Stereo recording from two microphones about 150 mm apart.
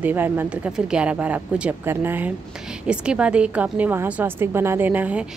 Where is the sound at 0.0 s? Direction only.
15° right (ahead or behind).